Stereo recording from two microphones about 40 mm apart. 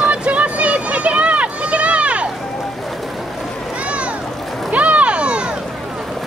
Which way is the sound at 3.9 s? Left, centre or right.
Right.